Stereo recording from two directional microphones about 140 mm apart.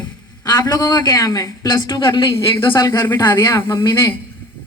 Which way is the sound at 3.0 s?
15° left (ahead or behind).